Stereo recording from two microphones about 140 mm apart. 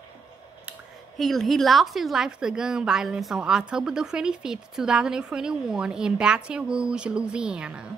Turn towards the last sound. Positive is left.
turn(degrees=-5)  # may be behind; listen again after turning